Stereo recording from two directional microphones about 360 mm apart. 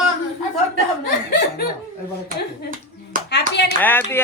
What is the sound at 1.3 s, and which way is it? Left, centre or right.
Laughter, left.